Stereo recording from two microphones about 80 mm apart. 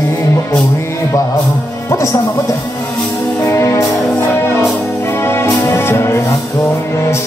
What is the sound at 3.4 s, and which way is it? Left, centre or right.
Music, left.